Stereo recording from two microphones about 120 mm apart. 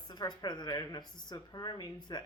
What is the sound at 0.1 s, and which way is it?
Speech, 35° left (ahead or behind).